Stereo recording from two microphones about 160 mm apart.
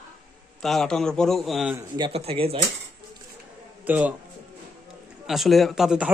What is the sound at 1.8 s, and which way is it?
Speech, 30° right (ahead or behind).